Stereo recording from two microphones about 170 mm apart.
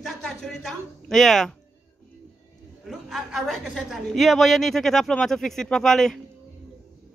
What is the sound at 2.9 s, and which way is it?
A woman's voice, centre (ahead or behind).